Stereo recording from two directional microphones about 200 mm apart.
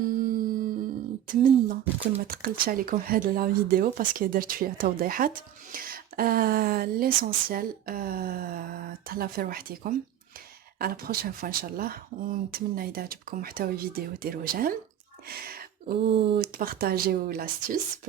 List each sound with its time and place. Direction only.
0.1 s music: 45° right (ahead or behind)
1.3 s beatboxing: 40° right (ahead or behind)
2.2 s speech: 50° right (ahead or behind)